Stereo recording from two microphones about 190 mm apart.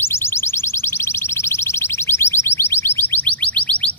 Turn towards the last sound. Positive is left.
turn(degrees=5)  # may be behind; listen again after turning